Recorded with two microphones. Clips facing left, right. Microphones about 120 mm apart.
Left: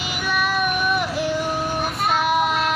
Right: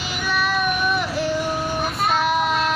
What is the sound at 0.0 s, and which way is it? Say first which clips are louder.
Music: even; 15° left (ahead or behind).